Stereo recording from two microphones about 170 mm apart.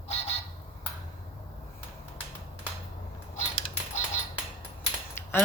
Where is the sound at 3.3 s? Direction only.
45° left (ahead or behind).